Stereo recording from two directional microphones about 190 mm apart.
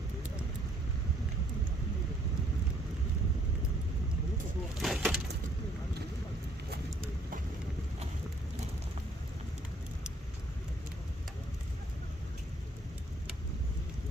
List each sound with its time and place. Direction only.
4.8 s wood: 5° right (ahead or behind)